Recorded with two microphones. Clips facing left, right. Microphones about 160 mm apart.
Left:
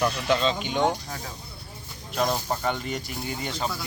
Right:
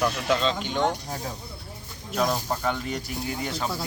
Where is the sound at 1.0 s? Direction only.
30° right (ahead or behind).